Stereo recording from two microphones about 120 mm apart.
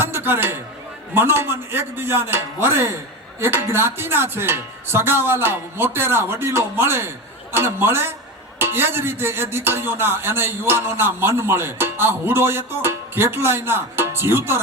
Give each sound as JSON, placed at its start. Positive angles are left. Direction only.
{"t": 0.0, "sound": "music", "side_deg": -20}
{"t": 1.1, "sound": "speech", "side_deg": -20}